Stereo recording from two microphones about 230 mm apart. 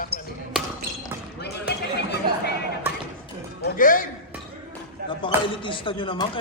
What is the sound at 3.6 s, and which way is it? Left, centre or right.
Speech, left.